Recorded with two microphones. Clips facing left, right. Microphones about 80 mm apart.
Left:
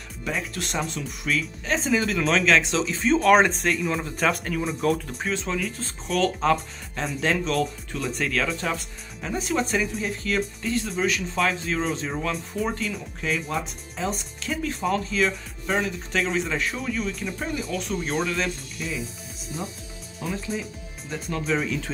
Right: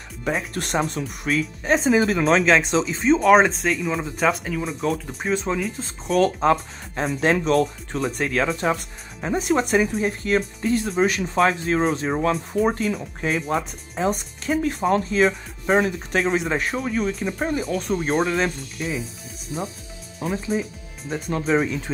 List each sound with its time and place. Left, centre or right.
0.2 s speech: right
2.8 s speech: centre
5.0 s speech: centre
6.0 s speech: right
8.2 s speech: right
10.6 s speech: right
20.2 s speech: right